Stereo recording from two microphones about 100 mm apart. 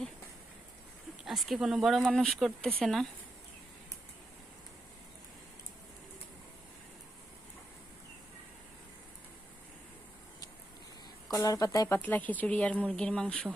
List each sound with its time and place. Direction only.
1.2 s a sound: centre (ahead or behind)
1.5 s speech: 5° right (ahead or behind)
11.3 s speech: 40° left (ahead or behind)
11.9 s speech: 15° left (ahead or behind)